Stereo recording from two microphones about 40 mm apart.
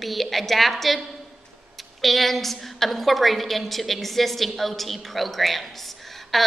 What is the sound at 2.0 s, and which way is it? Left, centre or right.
A woman's voice, centre.